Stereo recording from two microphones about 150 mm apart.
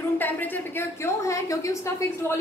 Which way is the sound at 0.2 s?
15° left (ahead or behind).